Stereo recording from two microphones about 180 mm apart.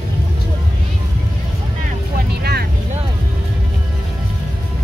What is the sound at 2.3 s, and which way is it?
Vehicle, 60° right (ahead or behind).